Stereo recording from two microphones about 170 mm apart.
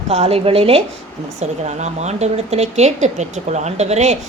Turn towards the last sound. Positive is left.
turn(degrees=-40)  # may be behind; listen again after turning